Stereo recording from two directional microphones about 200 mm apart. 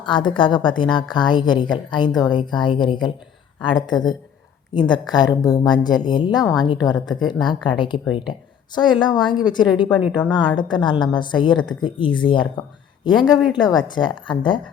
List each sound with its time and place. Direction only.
0.0 s a woman's voice: 25° left (ahead or behind)
7.9 s speech: 5° right (ahead or behind)
8.3 s a woman's voice: 20° left (ahead or behind)